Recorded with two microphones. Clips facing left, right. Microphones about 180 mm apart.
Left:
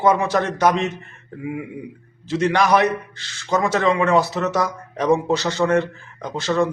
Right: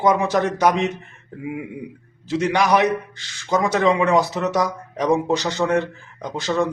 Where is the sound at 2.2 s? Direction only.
10° right (ahead or behind).